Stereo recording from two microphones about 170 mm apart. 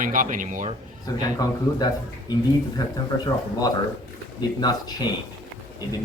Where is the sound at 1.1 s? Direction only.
20° left (ahead or behind).